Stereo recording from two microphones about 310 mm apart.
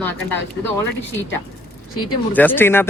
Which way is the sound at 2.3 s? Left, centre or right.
Centre.